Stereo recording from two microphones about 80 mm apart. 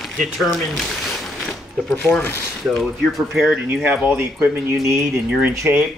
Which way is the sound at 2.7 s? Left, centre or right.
Centre.